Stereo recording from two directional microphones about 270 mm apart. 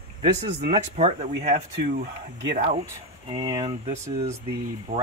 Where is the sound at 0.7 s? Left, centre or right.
Right.